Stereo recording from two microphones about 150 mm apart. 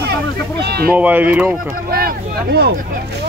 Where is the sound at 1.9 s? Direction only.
85° right.